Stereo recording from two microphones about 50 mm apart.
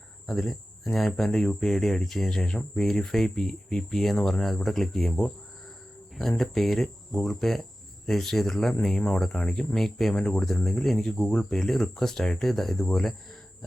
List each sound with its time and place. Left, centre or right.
0.3 s speech: centre
10.2 s speech: centre
11.2 s speech: centre
11.4 s speech: centre